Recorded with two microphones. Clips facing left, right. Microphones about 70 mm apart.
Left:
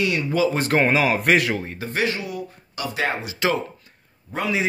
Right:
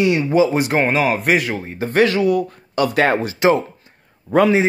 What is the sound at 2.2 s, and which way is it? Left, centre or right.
Speech, right.